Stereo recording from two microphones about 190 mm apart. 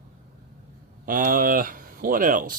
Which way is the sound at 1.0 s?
45° right (ahead or behind).